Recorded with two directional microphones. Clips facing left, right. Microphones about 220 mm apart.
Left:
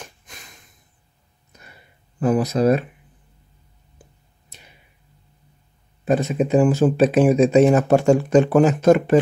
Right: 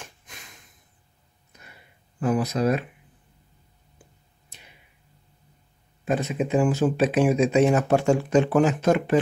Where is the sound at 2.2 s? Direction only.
40° left (ahead or behind).